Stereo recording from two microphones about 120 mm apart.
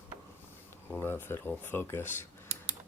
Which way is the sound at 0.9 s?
20° left (ahead or behind).